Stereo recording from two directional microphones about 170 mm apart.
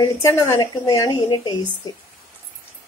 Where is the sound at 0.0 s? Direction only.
20° left (ahead or behind).